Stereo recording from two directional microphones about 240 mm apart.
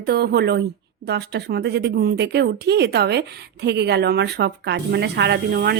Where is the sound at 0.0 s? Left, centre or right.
Right.